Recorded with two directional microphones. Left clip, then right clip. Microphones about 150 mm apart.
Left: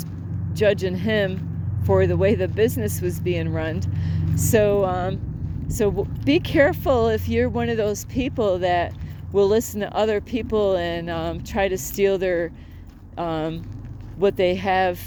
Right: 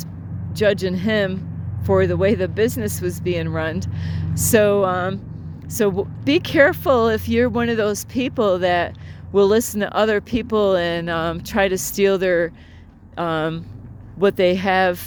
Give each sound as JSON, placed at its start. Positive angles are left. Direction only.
{"t": 0.5, "sound": "speech", "side_deg": -40}